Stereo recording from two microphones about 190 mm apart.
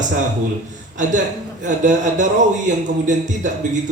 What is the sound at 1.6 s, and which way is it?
Speech, 40° right (ahead or behind).